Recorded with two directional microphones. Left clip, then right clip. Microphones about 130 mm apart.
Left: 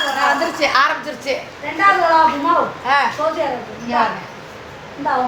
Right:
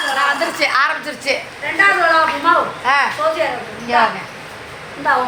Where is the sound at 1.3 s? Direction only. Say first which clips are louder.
Right 3 dB; 40° right (ahead or behind).